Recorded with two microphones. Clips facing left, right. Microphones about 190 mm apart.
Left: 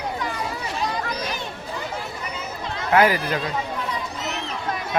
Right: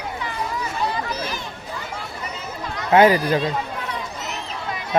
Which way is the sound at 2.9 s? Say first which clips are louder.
Right 4 dB; 25° right (ahead or behind).